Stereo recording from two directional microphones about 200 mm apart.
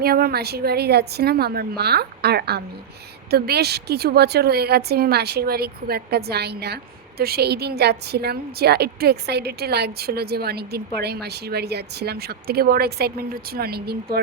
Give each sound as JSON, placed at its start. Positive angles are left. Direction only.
{"t": 0.0, "sound": "a woman's voice", "side_deg": -50}